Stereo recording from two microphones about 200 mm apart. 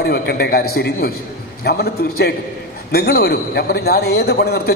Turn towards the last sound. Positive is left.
turn(degrees=50)  # may be behind; listen again after turning